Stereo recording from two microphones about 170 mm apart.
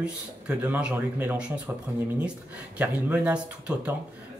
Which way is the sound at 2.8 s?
10° right (ahead or behind).